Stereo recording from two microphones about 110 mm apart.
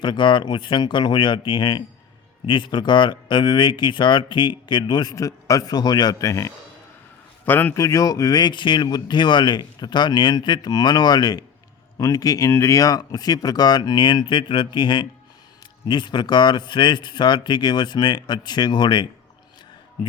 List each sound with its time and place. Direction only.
0.0 s speech: 45° left (ahead or behind); by 6.5 s 30° left (ahead or behind)
7.4 s a man's voice: 15° left (ahead or behind)
7.8 s speech: 30° left (ahead or behind)